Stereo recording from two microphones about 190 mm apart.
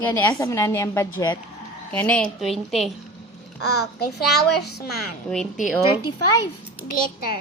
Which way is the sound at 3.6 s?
60° left (ahead or behind).